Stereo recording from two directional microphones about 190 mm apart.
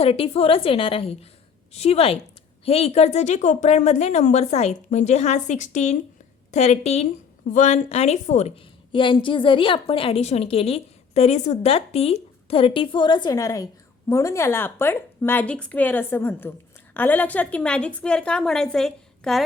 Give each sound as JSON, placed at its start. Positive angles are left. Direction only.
{"t": 0.0, "sound": "a woman's voice", "side_deg": 30}